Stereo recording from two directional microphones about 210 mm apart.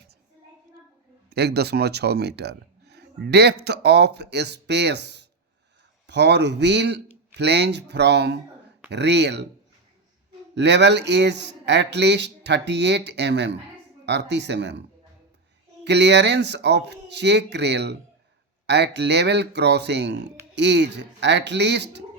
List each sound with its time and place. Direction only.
1.3 s speech: 50° right (ahead or behind)
10.5 s speech: 55° right (ahead or behind)